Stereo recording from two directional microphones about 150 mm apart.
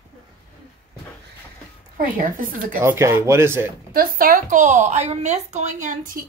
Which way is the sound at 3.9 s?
75° right (ahead or behind).